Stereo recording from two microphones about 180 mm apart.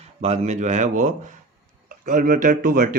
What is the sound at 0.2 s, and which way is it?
A man's voice, 35° right (ahead or behind).